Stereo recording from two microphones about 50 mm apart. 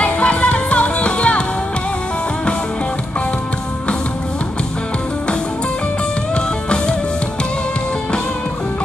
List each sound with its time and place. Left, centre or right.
0.0 s music: left
6.3 s music: centre